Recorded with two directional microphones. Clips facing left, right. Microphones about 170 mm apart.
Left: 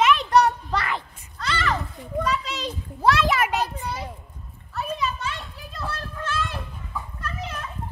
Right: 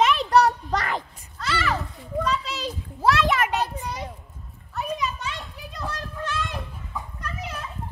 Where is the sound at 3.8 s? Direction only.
15° right (ahead or behind).